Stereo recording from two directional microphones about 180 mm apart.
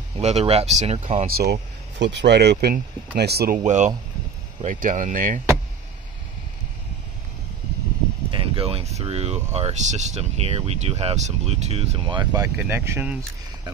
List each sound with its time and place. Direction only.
0.2 s speech: 35° right (ahead or behind)
1.2 s speech: 60° right (ahead or behind)
3.5 s speech: 40° right (ahead or behind)
8.3 s speech: 30° right (ahead or behind)
12.3 s speech: 15° right (ahead or behind)